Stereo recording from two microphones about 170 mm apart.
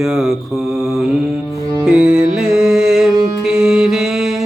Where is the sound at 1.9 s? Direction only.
5° right (ahead or behind).